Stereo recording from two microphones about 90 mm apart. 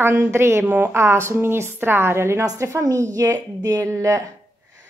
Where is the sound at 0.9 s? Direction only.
30° right (ahead or behind).